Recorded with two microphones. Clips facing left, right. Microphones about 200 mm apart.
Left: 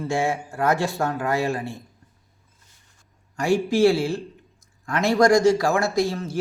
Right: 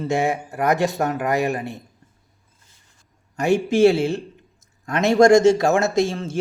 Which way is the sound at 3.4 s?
20° right (ahead or behind).